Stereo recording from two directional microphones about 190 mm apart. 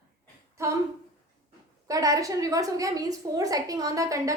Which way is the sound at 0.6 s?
15° right (ahead or behind).